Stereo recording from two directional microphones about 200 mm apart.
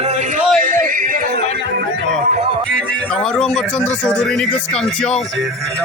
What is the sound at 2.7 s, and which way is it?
Speech, 5° left (ahead or behind).